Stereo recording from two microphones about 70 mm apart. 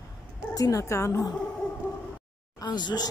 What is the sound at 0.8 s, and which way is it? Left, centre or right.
Speech, left.